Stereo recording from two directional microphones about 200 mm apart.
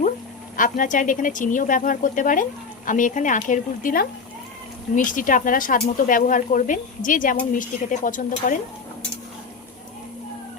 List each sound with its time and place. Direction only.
0.5 s speech: 40° left (ahead or behind)